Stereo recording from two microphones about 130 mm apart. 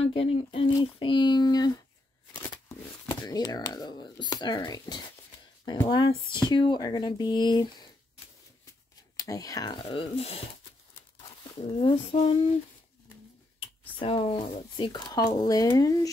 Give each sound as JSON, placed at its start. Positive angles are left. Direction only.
{"t": 0.0, "sound": "speech", "side_deg": 50}
{"t": 9.1, "sound": "speech", "side_deg": 25}
{"t": 9.8, "sound": "speech", "side_deg": 45}
{"t": 11.8, "sound": "speech", "side_deg": 50}
{"t": 13.9, "sound": "speech", "side_deg": 45}